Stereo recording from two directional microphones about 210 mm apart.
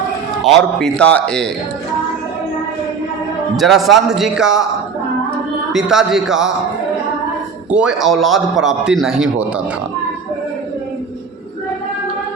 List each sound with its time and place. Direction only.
0.8 s a man's voice: 5° left (ahead or behind)
3.6 s a man's voice: centre (ahead or behind)
5.7 s a man's voice: centre (ahead or behind)
7.7 s a man's voice: 5° right (ahead or behind)